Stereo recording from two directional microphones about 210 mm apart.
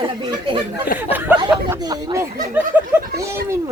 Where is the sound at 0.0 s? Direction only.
25° right (ahead or behind).